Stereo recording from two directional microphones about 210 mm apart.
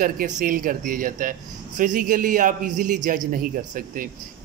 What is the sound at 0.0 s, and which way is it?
A man's voice, 40° right (ahead or behind).